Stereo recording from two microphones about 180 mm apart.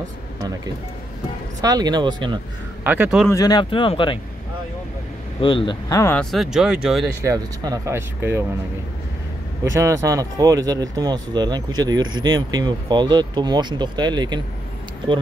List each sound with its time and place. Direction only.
1.6 s speech: 20° right (ahead or behind)
2.8 s speech: 10° right (ahead or behind)
3.3 s speech: 20° left (ahead or behind)
5.4 s speech: 30° left (ahead or behind)
5.9 s speech: 15° left (ahead or behind)
6.1 s speech: centre (ahead or behind)
7.2 s speech: 20° right (ahead or behind)
9.7 s speech: 15° right (ahead or behind)